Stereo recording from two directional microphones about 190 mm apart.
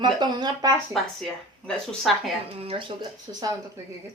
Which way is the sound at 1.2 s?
5° left (ahead or behind).